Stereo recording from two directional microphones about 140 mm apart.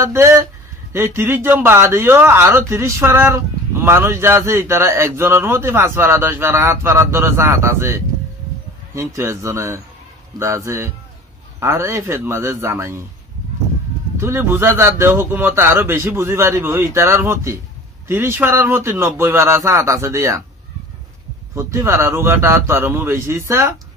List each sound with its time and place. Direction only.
0.0 s a man's voice: 20° right (ahead or behind)
14.1 s a man's voice: 20° right (ahead or behind)
21.5 s a man's voice: 20° right (ahead or behind)